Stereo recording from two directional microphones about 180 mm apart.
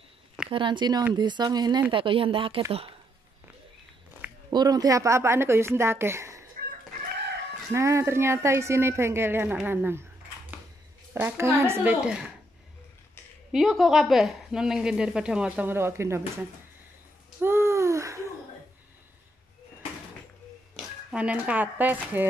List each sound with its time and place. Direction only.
0.5 s speech: 25° right (ahead or behind)
4.5 s a woman's voice: 20° right (ahead or behind)
7.7 s a woman's voice: 15° right (ahead or behind)
11.1 s a woman's voice: 15° right (ahead or behind)
13.5 s speech: centre (ahead or behind)
17.4 s a sound: 15° right (ahead or behind)
21.1 s a woman's voice: 5° right (ahead or behind)